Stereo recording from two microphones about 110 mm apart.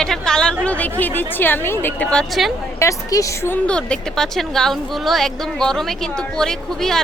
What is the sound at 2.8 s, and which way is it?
Speech, 30° left (ahead or behind).